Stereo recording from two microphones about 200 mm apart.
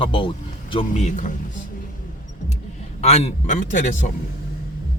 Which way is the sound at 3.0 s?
30° left (ahead or behind).